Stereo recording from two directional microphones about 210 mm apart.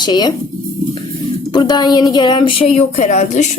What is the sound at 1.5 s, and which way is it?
A woman's voice, 20° left (ahead or behind).